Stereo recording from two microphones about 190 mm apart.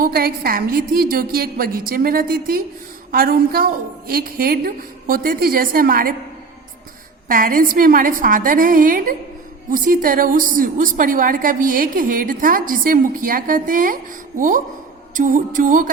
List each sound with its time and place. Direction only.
0.0 s a woman's voice: 50° right (ahead or behind)
7.3 s a woman's voice: 45° right (ahead or behind)